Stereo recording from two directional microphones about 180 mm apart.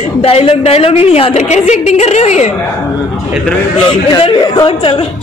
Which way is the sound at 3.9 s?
25° left (ahead or behind).